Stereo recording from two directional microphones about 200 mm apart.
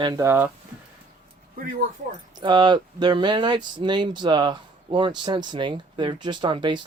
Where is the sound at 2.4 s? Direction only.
25° right (ahead or behind).